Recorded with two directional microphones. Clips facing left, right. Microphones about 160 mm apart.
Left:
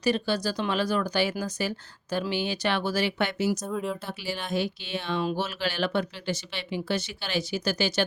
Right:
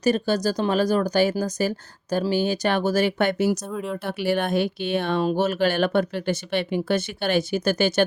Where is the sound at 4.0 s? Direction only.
60° right (ahead or behind).